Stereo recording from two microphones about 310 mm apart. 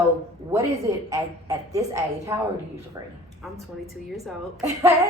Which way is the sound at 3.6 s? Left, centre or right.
Centre.